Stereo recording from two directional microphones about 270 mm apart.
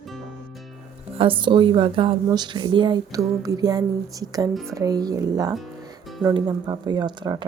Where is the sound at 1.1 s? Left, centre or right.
Centre.